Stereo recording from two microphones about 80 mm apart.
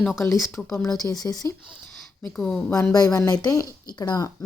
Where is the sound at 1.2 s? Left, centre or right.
Left.